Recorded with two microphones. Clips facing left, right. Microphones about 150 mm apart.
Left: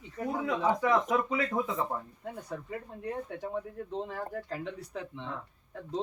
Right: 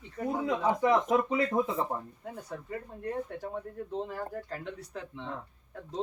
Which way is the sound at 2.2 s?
Centre (ahead or behind).